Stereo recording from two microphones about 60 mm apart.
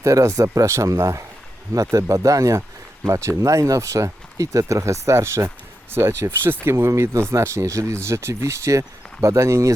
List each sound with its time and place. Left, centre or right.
0.0 s speech: right